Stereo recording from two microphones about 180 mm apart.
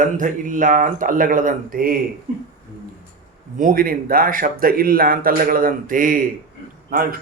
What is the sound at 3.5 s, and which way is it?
A man's voice, 50° right (ahead or behind).